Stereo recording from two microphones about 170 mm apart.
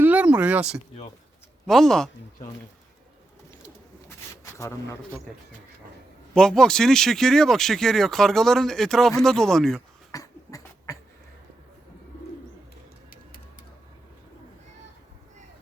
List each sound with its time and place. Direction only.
0.0 s a sound: 10° right (ahead or behind)
1.6 s speech: centre (ahead or behind)
6.3 s speech: 5° left (ahead or behind)
10.1 s cough: 20° left (ahead or behind)